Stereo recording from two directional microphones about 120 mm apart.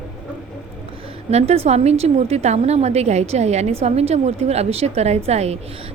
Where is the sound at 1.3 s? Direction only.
60° right (ahead or behind).